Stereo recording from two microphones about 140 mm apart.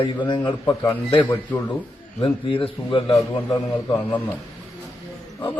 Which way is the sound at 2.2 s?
40° left (ahead or behind).